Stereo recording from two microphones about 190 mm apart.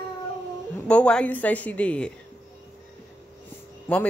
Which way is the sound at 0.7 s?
5° left (ahead or behind).